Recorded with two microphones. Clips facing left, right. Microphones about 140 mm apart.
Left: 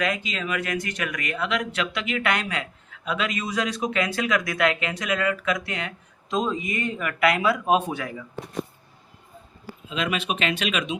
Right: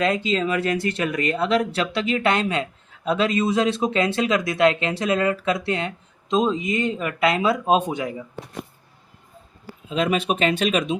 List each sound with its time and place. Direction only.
0.0 s speech: 30° right (ahead or behind)
9.9 s speech: 40° right (ahead or behind)